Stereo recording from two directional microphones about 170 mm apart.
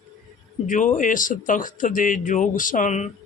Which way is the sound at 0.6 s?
50° left (ahead or behind).